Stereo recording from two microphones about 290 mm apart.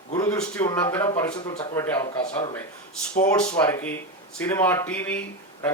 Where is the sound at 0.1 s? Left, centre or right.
Centre.